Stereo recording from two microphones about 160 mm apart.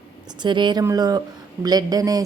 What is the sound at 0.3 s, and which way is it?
A woman's voice, 30° right (ahead or behind).